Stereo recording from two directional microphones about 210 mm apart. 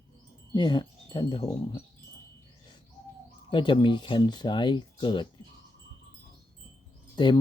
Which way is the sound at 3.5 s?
25° left (ahead or behind).